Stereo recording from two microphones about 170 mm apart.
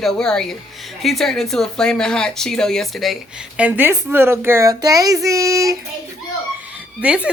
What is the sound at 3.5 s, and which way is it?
A woman's voice, 10° right (ahead or behind).